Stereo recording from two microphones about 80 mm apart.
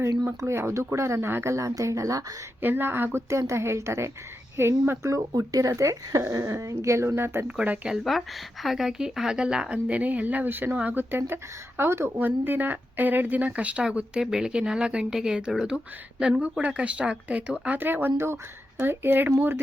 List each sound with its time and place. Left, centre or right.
0.4 s speech: right
1.5 s speech: right
2.6 s speech: right
5.3 s speech: right
7.9 s speech: centre; by 19.5 s right